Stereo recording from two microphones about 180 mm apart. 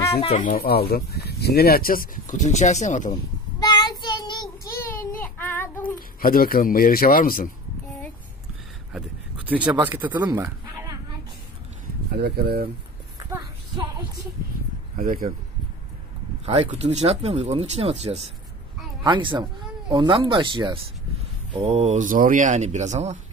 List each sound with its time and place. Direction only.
0.1 s speech: 30° left (ahead or behind)
0.5 s speech: 55° left (ahead or behind)
3.5 s child singing: 25° left (ahead or behind)
5.2 s child singing: 10° left (ahead or behind)
6.2 s speech: 55° left (ahead or behind)
8.9 s a sound: 10° right (ahead or behind)
10.2 s bleat: 15° right (ahead or behind)
12.2 s speech: 60° right (ahead or behind)
13.2 s a sound: 20° right (ahead or behind)
15.0 s speech: 55° right (ahead or behind)
16.4 s speech: 35° right (ahead or behind)
19.0 s speech: 25° right (ahead or behind)